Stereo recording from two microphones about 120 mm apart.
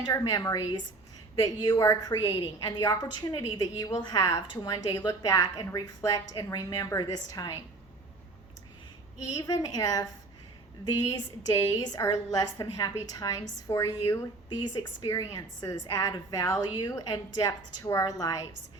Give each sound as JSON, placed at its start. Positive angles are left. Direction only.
{"t": 0.0, "sound": "a woman's voice", "side_deg": 30}
{"t": 9.3, "sound": "a woman's voice", "side_deg": 30}
{"t": 11.1, "sound": "a woman's voice", "side_deg": 30}